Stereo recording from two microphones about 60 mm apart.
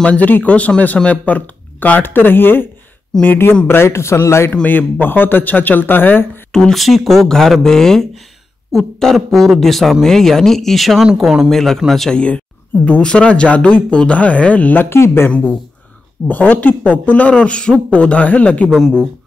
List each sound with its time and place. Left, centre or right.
0.0 s a man's voice: centre; by 4.5 s left
4.6 s speech: left
6.5 s speech: centre
11.1 s speech: centre
11.5 s speech: centre
12.1 s speech: centre
14.9 s a man's voice: left
16.3 s speech: left
18.7 s speech: centre